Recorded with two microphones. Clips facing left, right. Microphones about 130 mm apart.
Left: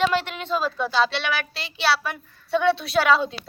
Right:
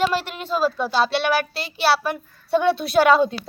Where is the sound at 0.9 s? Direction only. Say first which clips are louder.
Right 1 dB; 50° right (ahead or behind).